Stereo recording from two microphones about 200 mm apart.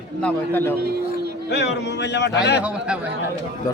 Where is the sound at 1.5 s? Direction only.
60° left (ahead or behind).